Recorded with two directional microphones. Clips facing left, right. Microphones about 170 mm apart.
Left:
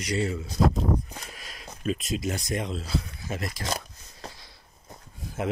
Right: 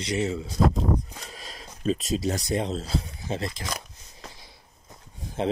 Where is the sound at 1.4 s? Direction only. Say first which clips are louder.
Right 2 dB; 30° right (ahead or behind).